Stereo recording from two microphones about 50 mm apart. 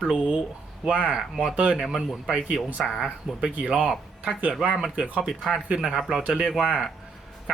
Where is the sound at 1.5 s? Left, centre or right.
Right.